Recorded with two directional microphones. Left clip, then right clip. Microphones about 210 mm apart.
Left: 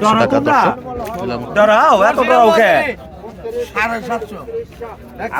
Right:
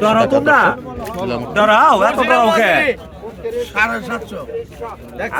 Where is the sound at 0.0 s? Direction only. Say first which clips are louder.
Even; 10° left (ahead or behind); by 1.5 s 5° right (ahead or behind).